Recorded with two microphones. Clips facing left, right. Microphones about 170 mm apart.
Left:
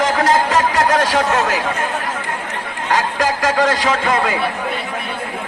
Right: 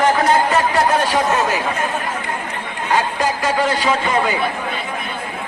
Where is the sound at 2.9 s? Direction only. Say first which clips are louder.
Left 1 dB; 90° left.